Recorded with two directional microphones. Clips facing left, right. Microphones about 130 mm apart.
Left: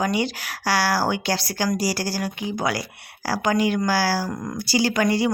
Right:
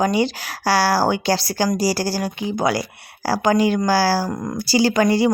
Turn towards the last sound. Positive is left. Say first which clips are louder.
# right 4 dB
turn(degrees=-30)  # may be behind; listen again after turning